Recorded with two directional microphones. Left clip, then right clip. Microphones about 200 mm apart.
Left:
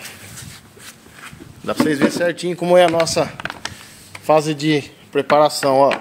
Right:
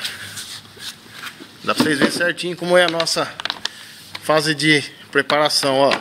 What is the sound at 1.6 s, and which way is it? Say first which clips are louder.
Speech: even; 20° left (ahead or behind).